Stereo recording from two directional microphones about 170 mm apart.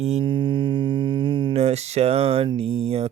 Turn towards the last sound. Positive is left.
turn(degrees=-35)  # may be behind; listen again after turning